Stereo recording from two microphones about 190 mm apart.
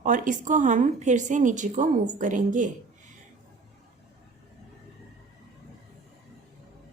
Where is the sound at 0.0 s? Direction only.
40° right (ahead or behind).